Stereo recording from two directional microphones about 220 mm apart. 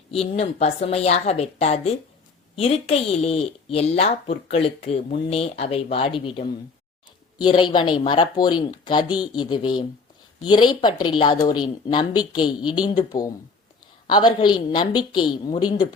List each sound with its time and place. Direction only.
0.1 s speech: 30° left (ahead or behind)
7.4 s speech: 20° left (ahead or behind)